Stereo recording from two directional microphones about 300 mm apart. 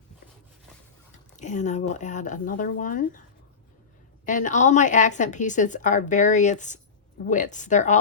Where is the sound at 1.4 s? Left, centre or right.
Left.